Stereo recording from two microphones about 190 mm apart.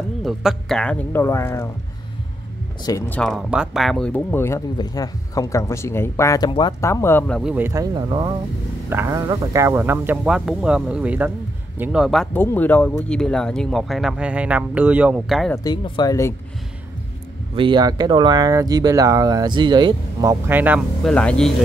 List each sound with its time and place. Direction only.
0.2 s speech: centre (ahead or behind); by 1.7 s 15° left (ahead or behind)
3.1 s speech: 5° left (ahead or behind)
7.5 s speech: 15° right (ahead or behind)
15.5 s speech: 20° left (ahead or behind)
17.6 s speech: 25° right (ahead or behind)
21.0 s speech: 5° left (ahead or behind)